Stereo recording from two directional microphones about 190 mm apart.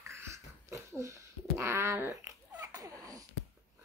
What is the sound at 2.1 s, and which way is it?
Babbling, 15° right (ahead or behind).